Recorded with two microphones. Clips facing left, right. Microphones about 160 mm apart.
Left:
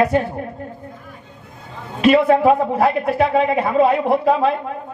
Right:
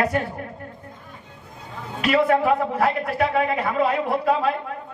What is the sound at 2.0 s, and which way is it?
A man's voice, 25° left (ahead or behind).